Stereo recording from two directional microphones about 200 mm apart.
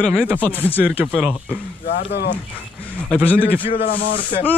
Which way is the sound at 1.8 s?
50° left (ahead or behind).